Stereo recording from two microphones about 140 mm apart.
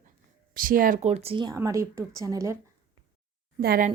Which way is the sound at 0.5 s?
85° right.